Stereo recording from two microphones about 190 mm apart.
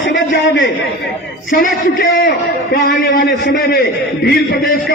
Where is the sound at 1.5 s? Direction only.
50° left (ahead or behind).